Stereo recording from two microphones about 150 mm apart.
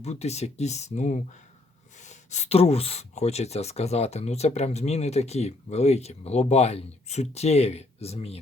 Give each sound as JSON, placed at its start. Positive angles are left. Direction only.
{"t": 0.0, "sound": "speech", "side_deg": 45}